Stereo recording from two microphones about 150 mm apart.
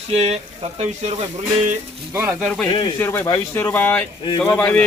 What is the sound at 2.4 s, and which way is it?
Speech, 5° left (ahead or behind).